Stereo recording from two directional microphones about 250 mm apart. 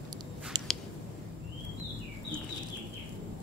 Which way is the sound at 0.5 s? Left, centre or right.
Centre.